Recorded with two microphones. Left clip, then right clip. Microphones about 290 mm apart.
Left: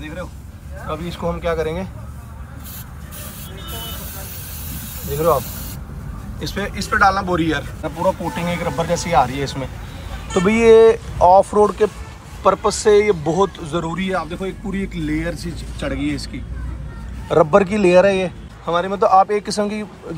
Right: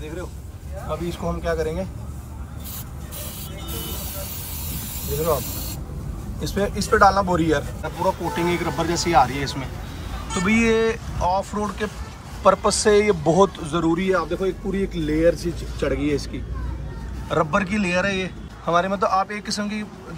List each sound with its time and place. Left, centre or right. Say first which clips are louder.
0.8 s speech: left 3 dB; centre
4.7 s vehicle: left 3 dB; centre
6.4 s speech: right 1 dB; centre
8.0 s speech: left 2 dB; centre
12.4 s speech: left 2 dB; centre
18.7 s speech: left 4 dB; centre